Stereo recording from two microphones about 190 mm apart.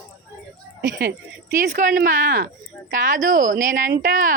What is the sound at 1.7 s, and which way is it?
A woman's voice, 45° right (ahead or behind).